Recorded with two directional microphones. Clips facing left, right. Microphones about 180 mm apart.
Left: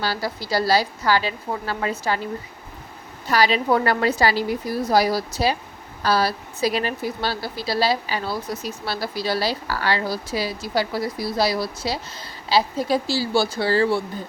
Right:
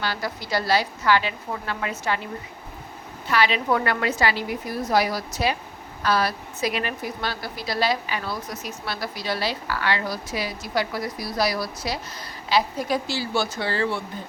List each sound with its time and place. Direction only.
0.0 s speech: 35° left (ahead or behind)
3.2 s speech: 40° left (ahead or behind)